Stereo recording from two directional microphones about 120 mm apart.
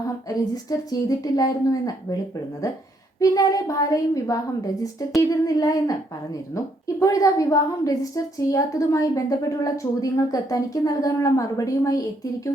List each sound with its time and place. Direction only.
0.3 s a woman's voice: 30° left (ahead or behind)
3.2 s a woman's voice: 30° left (ahead or behind)